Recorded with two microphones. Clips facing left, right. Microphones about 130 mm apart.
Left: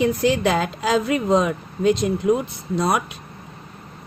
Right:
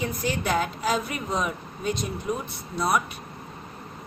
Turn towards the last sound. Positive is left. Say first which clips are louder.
# left 4 dB
turn(degrees=90)